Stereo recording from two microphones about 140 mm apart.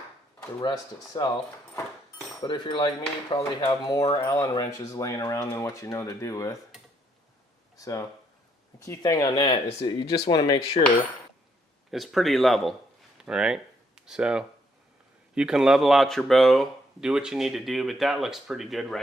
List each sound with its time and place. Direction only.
0.6 s speech: 30° left (ahead or behind)
2.4 s speech: 35° left (ahead or behind)
7.8 s speech: 25° left (ahead or behind)
11.9 s speech: centre (ahead or behind)